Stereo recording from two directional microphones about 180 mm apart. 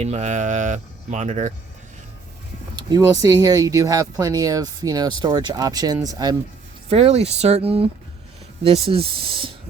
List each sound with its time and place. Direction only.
0.0 s speech: 40° right (ahead or behind)
2.7 s speech: 20° right (ahead or behind)
6.9 s speech: 35° right (ahead or behind)